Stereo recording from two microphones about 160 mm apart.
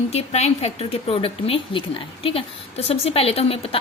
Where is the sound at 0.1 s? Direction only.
40° left (ahead or behind).